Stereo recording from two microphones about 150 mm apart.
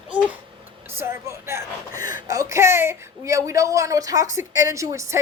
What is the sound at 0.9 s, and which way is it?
Speech, 15° right (ahead or behind).